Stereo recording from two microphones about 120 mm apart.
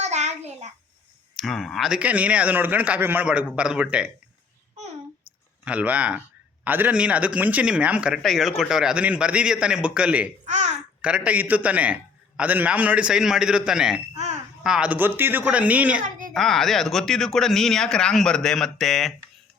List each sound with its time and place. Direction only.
0.0 s child singing: 75° right (ahead or behind)
1.4 s a man's voice: centre (ahead or behind)
5.6 s a man's voice: 10° right (ahead or behind)
16.0 s a sound: 90° right
16.3 s speech: centre (ahead or behind)